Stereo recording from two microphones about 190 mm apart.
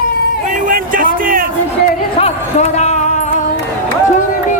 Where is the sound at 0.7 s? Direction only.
45° right (ahead or behind).